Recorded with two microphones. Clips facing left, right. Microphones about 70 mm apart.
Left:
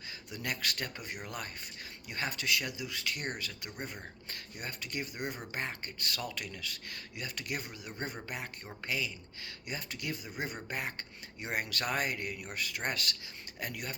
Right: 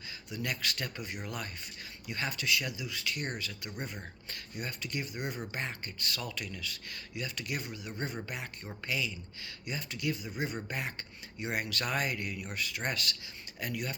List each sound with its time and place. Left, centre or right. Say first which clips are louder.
0.3 s speech: right 1 dB; left